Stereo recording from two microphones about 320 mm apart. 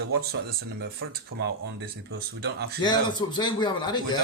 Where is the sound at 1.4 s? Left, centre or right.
Right.